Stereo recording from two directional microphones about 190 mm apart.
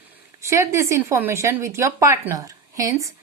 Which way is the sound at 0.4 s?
15° right (ahead or behind).